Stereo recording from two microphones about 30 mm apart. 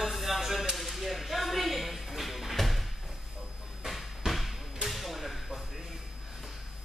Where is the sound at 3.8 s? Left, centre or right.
Centre.